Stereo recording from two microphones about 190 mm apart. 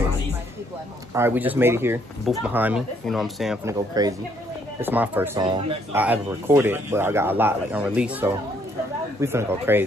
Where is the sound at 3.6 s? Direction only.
15° right (ahead or behind).